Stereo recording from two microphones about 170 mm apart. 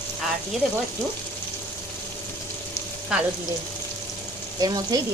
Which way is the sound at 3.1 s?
5° right (ahead or behind).